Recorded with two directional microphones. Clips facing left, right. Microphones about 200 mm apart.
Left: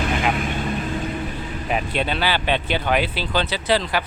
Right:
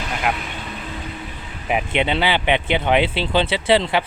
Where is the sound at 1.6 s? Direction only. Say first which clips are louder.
Right 3 dB; 15° right (ahead or behind).